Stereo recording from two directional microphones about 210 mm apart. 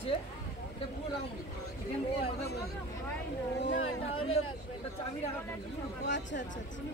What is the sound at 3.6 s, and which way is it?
Speech, 60° left (ahead or behind).